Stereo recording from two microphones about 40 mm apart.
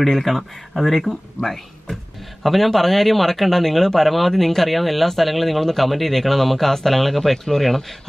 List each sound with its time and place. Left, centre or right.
0.0 s speech: centre
1.4 s speech: centre
2.4 s speech: centre